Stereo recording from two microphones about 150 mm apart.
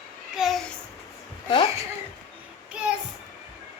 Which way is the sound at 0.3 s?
Centre (ahead or behind).